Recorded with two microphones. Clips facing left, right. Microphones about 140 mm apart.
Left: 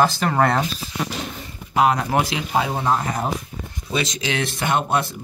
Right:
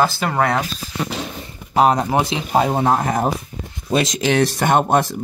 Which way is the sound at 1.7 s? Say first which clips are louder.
Right 3 dB; 35° right (ahead or behind).